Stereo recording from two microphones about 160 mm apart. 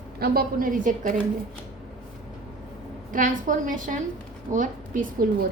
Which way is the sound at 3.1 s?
55° right (ahead or behind).